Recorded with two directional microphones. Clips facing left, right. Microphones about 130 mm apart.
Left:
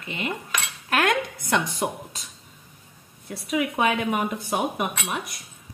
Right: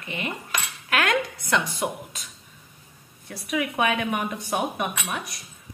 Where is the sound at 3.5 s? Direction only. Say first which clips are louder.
Left 1 dB; 20° left (ahead or behind).